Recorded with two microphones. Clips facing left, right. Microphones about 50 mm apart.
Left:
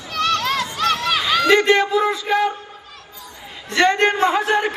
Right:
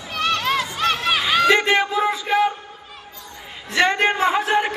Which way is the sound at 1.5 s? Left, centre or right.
Centre.